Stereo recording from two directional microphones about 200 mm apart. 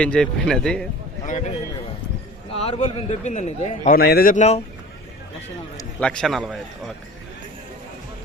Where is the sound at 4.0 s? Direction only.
50° left (ahead or behind).